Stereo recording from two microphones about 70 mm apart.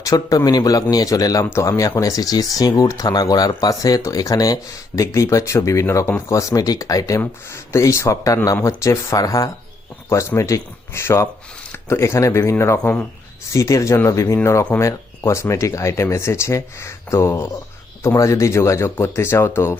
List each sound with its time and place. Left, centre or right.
0.0 s speech: left
6.5 s speech: left
7.5 s speech: left
9.2 s speech: left
10.1 s speech: left